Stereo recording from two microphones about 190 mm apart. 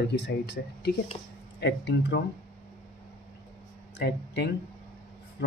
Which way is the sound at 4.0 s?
60° left (ahead or behind).